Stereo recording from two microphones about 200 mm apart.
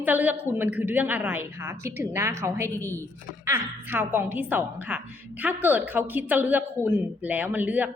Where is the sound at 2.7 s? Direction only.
10° left (ahead or behind).